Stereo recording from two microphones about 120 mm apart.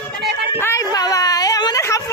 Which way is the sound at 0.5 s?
20° left (ahead or behind).